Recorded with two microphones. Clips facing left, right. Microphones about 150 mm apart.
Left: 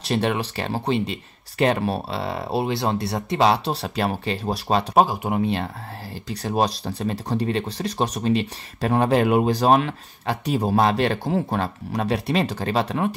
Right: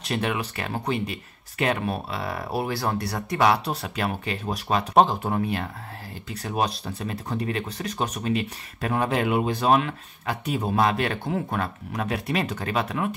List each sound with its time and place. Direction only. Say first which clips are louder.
0.0 s speech: left 4 dB; 35° left (ahead or behind)
4.9 s speech: right 1 dB; 10° left (ahead or behind)
5.4 s speech: left 4 dB; 30° left (ahead or behind)